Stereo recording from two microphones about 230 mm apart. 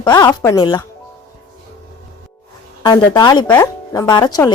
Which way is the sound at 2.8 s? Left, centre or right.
Centre.